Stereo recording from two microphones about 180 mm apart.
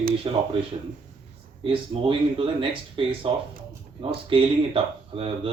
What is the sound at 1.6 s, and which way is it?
Speech, 30° right (ahead or behind).